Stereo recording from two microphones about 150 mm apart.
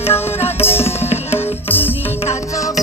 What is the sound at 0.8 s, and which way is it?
Sitar, 45° left (ahead or behind).